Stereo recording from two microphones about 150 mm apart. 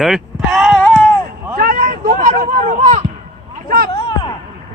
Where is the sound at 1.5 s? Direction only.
75° right (ahead or behind); by 3.0 s 55° right (ahead or behind).